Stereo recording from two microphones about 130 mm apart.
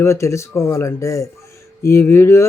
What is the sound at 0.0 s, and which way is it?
Speech, 20° left (ahead or behind).